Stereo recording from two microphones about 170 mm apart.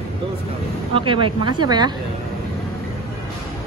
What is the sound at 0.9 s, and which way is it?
Speech, 30° right (ahead or behind).